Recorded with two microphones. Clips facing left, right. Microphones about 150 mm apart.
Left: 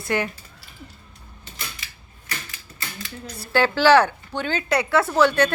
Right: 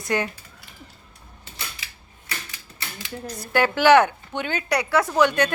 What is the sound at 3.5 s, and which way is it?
A woman's voice, 15° right (ahead or behind).